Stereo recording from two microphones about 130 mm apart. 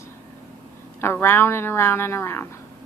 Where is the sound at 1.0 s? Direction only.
20° left (ahead or behind).